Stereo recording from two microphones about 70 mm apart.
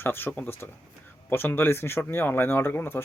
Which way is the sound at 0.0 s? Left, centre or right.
Left.